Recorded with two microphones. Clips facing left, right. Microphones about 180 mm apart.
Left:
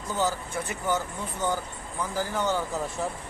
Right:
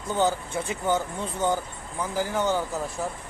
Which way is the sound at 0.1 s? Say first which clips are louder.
Right 4 dB; 25° right (ahead or behind).